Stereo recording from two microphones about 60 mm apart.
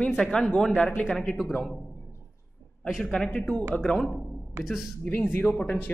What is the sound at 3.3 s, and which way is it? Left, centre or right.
Speech, centre.